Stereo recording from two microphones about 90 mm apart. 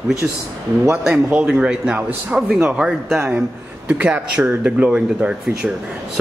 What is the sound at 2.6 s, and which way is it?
A man's voice, 10° right (ahead or behind).